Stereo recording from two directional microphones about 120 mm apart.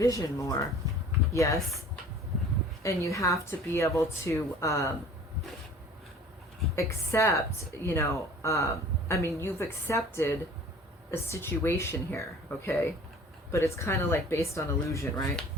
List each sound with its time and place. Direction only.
0.0 s speech: 25° left (ahead or behind)
2.8 s speech: 25° left (ahead or behind)
6.7 s speech: 25° left (ahead or behind)